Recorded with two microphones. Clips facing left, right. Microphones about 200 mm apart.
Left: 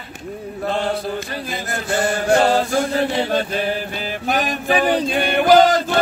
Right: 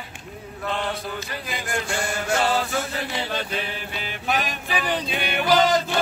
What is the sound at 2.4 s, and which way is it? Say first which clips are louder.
Music: left 7 dB; 45° left (ahead or behind).